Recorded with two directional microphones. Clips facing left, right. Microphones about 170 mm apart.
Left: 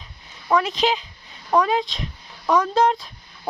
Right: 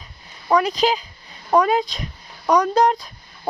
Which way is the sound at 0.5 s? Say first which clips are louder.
Right 2 dB; centre (ahead or behind).